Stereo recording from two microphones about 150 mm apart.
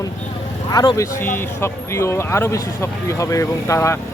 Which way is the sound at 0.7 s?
25° left (ahead or behind).